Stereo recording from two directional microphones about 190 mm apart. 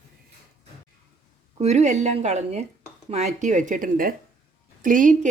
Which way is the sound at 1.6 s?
35° right (ahead or behind).